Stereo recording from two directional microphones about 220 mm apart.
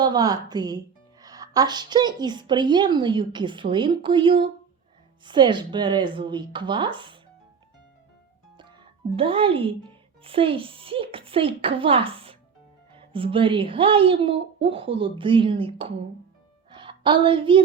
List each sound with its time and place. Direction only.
0.0 s a woman's voice: 20° right (ahead or behind)
9.1 s a woman's voice: 25° right (ahead or behind)